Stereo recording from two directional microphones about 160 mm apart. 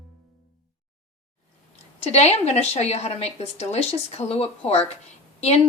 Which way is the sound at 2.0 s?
45° left (ahead or behind).